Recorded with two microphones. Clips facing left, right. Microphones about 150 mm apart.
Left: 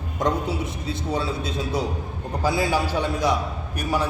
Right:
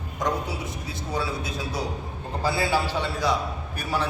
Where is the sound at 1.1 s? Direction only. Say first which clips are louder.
Left 2 dB; 25° left (ahead or behind).